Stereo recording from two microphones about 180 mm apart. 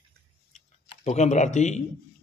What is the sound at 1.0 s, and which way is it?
Speech, 40° left (ahead or behind).